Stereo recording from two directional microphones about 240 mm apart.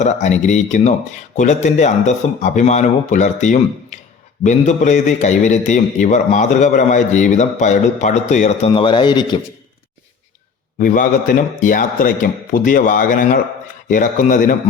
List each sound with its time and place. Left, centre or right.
0.0 s a man's voice: left
10.8 s a man's voice: left